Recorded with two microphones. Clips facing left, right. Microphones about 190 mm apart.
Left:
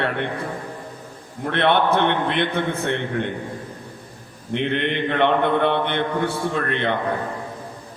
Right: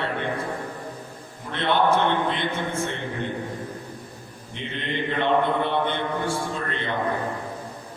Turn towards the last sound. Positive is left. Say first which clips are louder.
# left 6 dB
turn(degrees=65)  # may be behind; listen again after turning